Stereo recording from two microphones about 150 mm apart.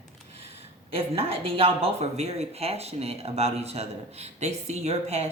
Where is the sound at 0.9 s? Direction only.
40° right (ahead or behind).